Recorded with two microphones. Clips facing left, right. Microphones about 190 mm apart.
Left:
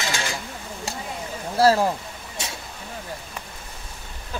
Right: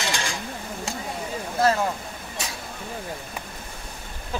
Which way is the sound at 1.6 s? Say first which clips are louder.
Left 4 dB; 35° left (ahead or behind).